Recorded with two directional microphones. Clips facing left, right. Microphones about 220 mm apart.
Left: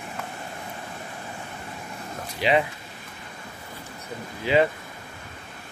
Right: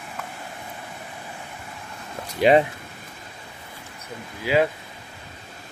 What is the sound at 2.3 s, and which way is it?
Speech, 45° right (ahead or behind).